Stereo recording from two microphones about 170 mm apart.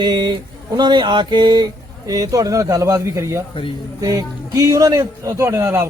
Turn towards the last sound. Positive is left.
turn(degrees=-15)  # may be behind; listen again after turning